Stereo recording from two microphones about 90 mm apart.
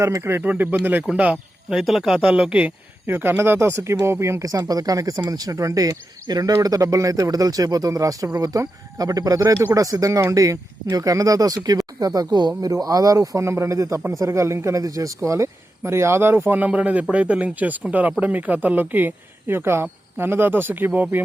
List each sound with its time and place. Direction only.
0.0 s speech: 30° right (ahead or behind); by 1.8 s 15° right (ahead or behind)
1.8 s speech: 5° right (ahead or behind); by 21.2 s 20° right (ahead or behind)